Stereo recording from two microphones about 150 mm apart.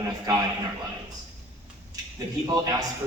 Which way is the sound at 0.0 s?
20° right (ahead or behind).